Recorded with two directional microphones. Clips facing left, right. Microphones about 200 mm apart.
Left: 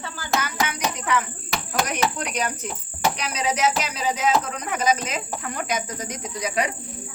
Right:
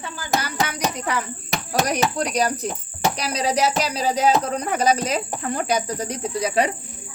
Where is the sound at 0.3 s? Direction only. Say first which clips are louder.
Right 1 dB; 35° right (ahead or behind).